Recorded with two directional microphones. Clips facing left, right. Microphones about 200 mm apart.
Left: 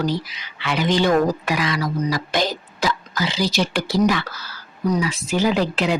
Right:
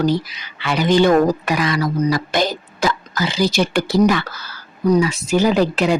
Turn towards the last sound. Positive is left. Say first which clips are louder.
# right 4 dB
turn(degrees=-45)  # may be behind; listen again after turning